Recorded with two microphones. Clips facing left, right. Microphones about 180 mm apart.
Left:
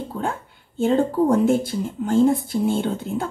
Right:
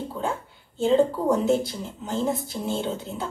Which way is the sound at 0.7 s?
55° left (ahead or behind).